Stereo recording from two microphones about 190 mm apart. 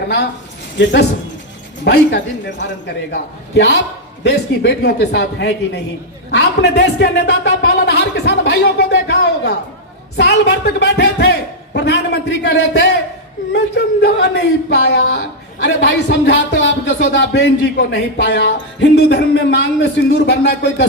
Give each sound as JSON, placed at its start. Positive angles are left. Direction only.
{"t": 0.8, "sound": "speech", "side_deg": 65}